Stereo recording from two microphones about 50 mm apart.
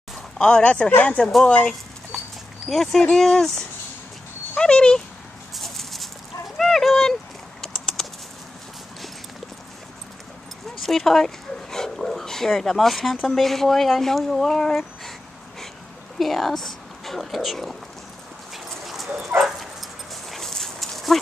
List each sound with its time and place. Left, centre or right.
0.4 s speech: left
2.1 s a sound: centre
3.0 s speech: centre
5.5 s a sound: centre
7.6 s typing: centre
10.8 s speech: centre
16.2 s speech: centre
18.7 s dog: centre